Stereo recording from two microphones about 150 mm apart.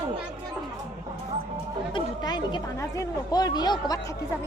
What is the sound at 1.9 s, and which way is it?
A woman's voice, 30° left (ahead or behind).